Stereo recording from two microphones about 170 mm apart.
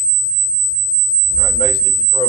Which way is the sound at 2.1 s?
25° left (ahead or behind).